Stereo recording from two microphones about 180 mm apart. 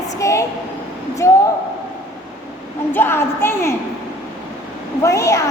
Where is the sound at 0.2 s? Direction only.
15° left (ahead or behind).